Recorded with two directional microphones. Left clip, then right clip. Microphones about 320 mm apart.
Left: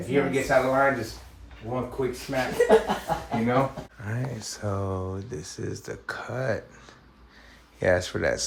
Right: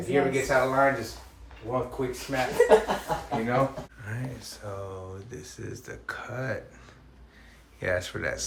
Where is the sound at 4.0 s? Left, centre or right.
Centre.